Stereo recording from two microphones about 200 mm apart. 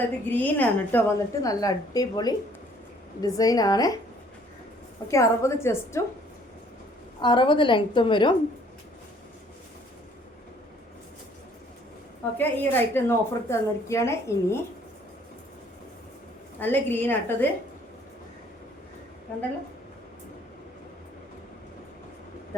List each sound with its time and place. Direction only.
0.3 s a woman's voice: 10° left (ahead or behind)
5.1 s a woman's voice: 15° left (ahead or behind)
7.2 s a woman's voice: 25° left (ahead or behind)
12.4 s a woman's voice: 10° left (ahead or behind)
16.6 s a woman's voice: 10° left (ahead or behind)